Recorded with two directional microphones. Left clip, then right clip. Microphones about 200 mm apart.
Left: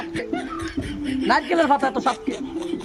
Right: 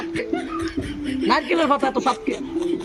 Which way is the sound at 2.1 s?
Centre (ahead or behind).